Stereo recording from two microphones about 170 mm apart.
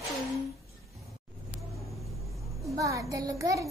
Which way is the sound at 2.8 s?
20° right (ahead or behind).